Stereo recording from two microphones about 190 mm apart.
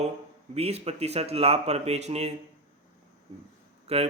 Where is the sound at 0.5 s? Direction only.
35° right (ahead or behind).